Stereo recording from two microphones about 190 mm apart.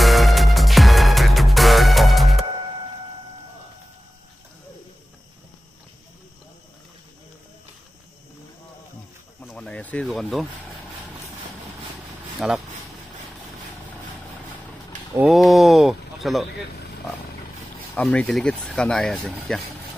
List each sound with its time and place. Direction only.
0.0 s music: centre (ahead or behind)
9.4 s a sound: 5° left (ahead or behind)
12.4 s speech: centre (ahead or behind)
15.1 s speech: centre (ahead or behind)
17.9 s speech: 5° left (ahead or behind)